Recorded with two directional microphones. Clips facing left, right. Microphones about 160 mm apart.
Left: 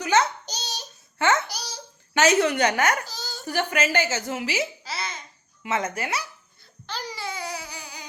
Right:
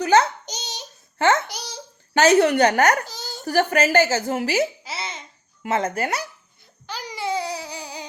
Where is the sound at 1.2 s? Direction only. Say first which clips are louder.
Right 3 dB; 30° right (ahead or behind).